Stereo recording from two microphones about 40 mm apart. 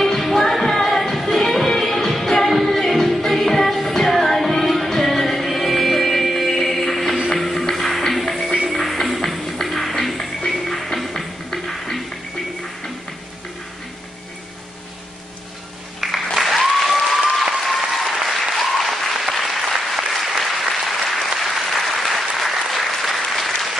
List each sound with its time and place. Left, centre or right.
0.0 s music: centre
16.0 s applause: centre